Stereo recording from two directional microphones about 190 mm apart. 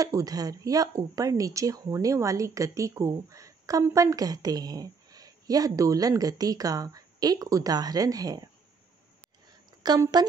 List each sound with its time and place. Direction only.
0.0 s speech: 20° right (ahead or behind)
9.8 s speech: 20° right (ahead or behind)